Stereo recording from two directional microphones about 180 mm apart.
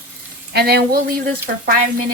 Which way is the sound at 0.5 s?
60° right (ahead or behind).